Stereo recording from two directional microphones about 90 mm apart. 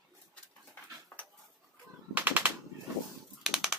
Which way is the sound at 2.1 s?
20° right (ahead or behind).